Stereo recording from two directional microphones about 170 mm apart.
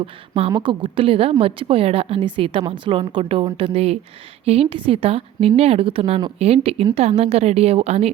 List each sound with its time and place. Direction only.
0.0 s a woman's voice: 35° right (ahead or behind)